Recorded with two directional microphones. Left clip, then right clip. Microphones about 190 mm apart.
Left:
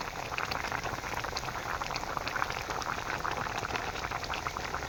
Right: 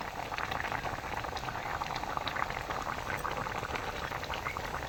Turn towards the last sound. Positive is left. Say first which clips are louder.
# left 1 dB
turn(degrees=25)  # may be behind; listen again after turning